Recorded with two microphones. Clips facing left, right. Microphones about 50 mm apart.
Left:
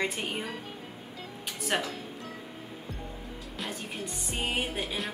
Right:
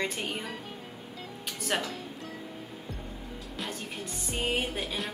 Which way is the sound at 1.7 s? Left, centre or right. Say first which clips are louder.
Left 1 dB; centre.